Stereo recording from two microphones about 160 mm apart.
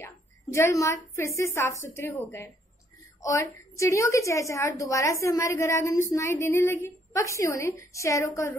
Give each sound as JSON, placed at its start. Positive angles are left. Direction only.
{"t": 0.0, "sound": "a woman's voice", "side_deg": 15}